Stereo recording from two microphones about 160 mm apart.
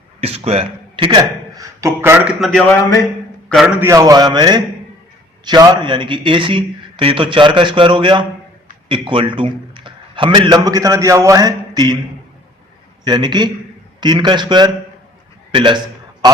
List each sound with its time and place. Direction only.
0.2 s a man's voice: 40° right (ahead or behind); by 2.3 s 10° right (ahead or behind)
3.5 s a man's voice: 5° right (ahead or behind)
3.8 s a man's voice: 20° right (ahead or behind)
13.1 s a man's voice: 30° right (ahead or behind)
16.2 s a sound: 25° right (ahead or behind)